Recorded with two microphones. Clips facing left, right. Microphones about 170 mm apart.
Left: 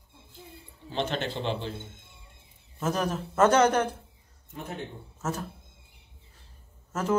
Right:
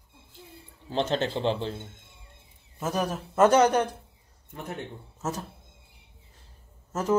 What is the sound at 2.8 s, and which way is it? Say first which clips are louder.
A man's voice: even; 15° right (ahead or behind).